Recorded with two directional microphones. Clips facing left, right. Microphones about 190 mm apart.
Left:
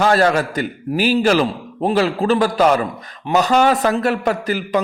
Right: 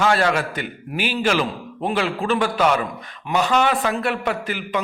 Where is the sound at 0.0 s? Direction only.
40° left (ahead or behind).